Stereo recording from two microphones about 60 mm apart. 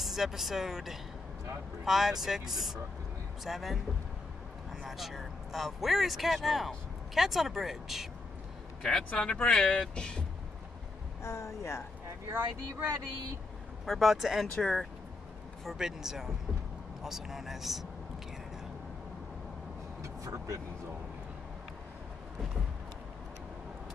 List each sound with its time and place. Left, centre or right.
0.0 s speech: centre
4.8 s speech: centre
8.8 s speech: centre
11.2 s speech: left
12.3 s speech: right
13.8 s speech: centre
15.6 s speech: centre
20.0 s speech: right